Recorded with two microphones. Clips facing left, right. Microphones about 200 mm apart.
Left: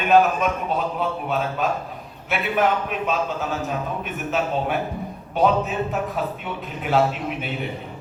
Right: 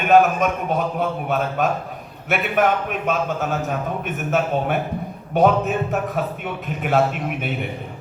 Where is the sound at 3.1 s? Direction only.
50° right (ahead or behind).